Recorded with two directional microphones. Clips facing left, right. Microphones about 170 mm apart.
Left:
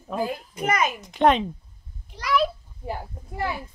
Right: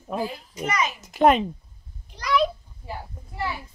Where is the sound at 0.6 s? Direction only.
50° left (ahead or behind).